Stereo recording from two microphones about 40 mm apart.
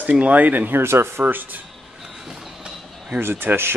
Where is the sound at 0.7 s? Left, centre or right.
Right.